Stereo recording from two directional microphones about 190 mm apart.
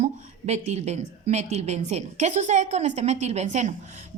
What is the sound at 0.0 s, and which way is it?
A woman's voice, 35° right (ahead or behind).